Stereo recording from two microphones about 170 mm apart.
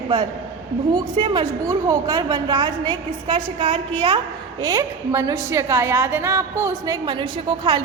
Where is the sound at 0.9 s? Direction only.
25° right (ahead or behind).